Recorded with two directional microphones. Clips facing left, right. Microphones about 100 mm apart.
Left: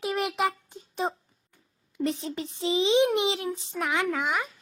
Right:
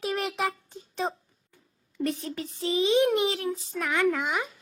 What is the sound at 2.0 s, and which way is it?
A child's voice, 25° left (ahead or behind).